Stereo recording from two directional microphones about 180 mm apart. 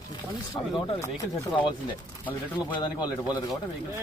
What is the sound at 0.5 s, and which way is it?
Speech, 15° left (ahead or behind).